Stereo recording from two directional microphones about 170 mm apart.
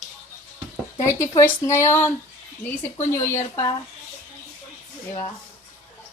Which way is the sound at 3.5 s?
25° left (ahead or behind).